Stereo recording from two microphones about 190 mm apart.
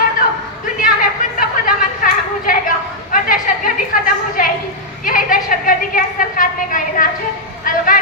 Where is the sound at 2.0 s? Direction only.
45° left (ahead or behind).